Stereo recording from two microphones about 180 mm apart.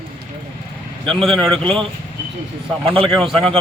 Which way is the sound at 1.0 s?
Centre (ahead or behind).